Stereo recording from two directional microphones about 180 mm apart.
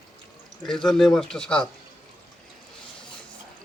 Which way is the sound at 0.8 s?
Centre (ahead or behind).